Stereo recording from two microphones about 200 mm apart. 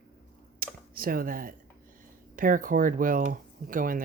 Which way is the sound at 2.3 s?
45° right (ahead or behind).